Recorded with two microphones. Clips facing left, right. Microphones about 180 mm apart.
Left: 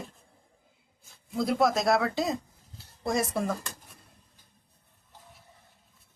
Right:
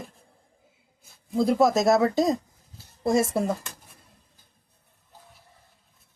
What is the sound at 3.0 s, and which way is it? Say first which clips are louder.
Speech: right 5 dB; 25° right (ahead or behind).